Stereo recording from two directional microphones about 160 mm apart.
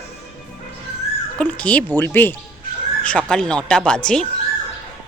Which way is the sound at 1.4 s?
10° left (ahead or behind).